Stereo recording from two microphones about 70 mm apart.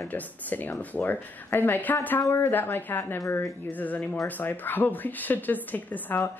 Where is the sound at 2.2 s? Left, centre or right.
Left.